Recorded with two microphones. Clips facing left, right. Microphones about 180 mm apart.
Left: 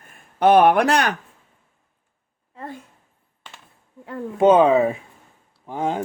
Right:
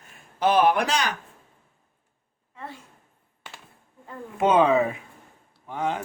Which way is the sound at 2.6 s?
50° left (ahead or behind).